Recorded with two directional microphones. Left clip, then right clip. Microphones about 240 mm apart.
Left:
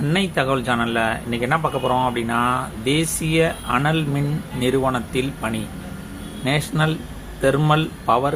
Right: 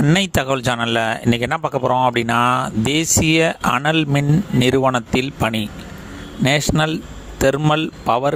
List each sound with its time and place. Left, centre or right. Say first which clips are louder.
0.0 s a man's voice: right 3 dB; right